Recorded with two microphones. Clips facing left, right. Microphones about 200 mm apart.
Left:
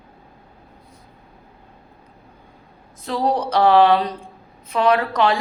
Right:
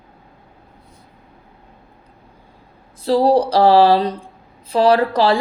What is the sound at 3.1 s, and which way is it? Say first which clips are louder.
A woman's voice: right 7 dB; 35° right (ahead or behind).